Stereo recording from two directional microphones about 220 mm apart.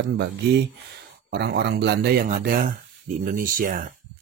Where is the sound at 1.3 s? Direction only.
50° right (ahead or behind).